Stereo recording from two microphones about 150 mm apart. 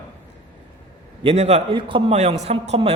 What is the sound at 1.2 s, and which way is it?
A man's voice, 45° right (ahead or behind).